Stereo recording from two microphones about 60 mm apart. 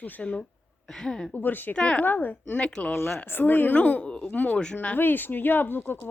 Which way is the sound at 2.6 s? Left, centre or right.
Centre.